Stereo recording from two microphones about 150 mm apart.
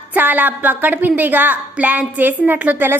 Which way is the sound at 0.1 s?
10° right (ahead or behind).